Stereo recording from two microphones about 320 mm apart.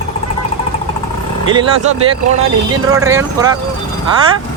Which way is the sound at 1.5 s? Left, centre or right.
Centre.